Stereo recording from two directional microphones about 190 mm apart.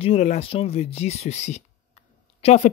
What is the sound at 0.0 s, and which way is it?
Speech, 35° left (ahead or behind).